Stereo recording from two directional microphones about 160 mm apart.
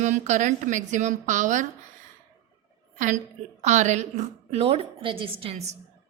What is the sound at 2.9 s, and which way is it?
A woman's voice, 50° right (ahead or behind).